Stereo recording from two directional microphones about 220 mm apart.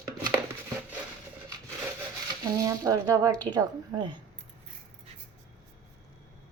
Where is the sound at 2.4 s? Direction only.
15° right (ahead or behind).